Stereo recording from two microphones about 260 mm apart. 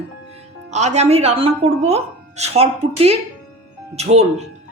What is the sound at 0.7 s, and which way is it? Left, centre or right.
A woman's voice, right.